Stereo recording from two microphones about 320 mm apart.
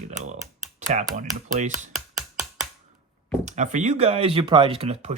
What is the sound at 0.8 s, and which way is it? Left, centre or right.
Speech, right.